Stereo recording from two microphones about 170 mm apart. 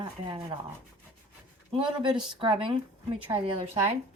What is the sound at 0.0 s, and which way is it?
Speech, 25° right (ahead or behind).